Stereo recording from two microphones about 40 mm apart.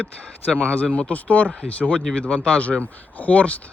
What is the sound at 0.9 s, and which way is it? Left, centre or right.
Speech, left.